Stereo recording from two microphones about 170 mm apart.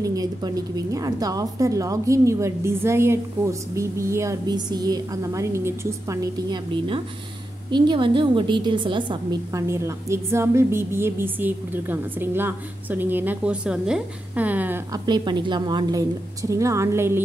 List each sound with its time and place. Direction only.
0.0 s a woman's voice: 20° right (ahead or behind)
14.9 s a woman's voice: 25° right (ahead or behind)